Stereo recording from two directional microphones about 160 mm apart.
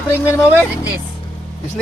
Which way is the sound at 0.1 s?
15° left (ahead or behind).